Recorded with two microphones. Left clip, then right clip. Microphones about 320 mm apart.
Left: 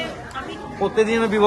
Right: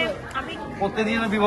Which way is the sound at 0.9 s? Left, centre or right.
Left.